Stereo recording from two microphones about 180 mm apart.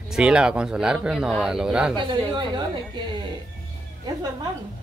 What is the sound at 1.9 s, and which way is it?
Speech, 25° right (ahead or behind).